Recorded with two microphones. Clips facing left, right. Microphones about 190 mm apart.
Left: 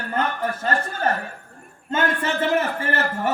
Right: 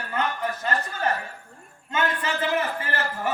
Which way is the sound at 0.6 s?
50° left (ahead or behind).